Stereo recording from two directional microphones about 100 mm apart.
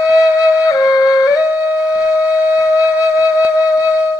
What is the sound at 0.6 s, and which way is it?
Flute, 35° left (ahead or behind).